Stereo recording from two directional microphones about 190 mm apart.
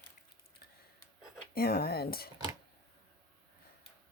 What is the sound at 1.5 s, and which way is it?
Speech, 55° left (ahead or behind).